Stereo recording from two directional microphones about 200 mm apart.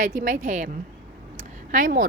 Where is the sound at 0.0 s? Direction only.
40° right (ahead or behind).